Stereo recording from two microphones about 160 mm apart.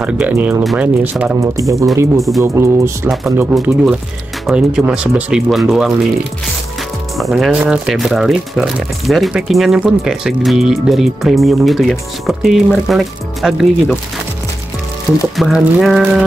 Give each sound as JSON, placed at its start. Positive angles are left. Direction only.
{"t": 0.0, "sound": "speech", "side_deg": -10}
{"t": 1.2, "sound": "speech", "side_deg": -15}
{"t": 2.1, "sound": "speech", "side_deg": 0}
{"t": 2.4, "sound": "speech", "side_deg": -15}
{"t": 3.5, "sound": "speech", "side_deg": -5}
{"t": 7.2, "sound": "speech", "side_deg": 0}
{"t": 15.3, "sound": "speech", "side_deg": 0}